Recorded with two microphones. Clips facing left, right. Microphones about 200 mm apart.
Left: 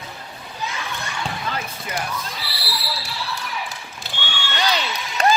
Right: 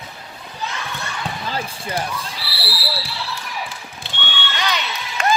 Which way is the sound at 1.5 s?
30° right (ahead or behind).